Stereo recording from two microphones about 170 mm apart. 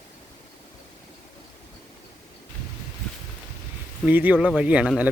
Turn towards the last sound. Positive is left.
turn(degrees=-10)  # may be behind; listen again after turning